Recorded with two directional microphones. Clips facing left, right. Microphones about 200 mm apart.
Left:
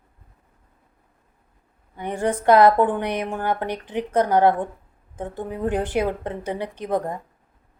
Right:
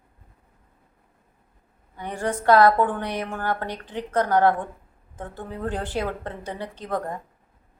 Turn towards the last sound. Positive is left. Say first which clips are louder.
# left 4 dB
turn(degrees=20)  # may be behind; listen again after turning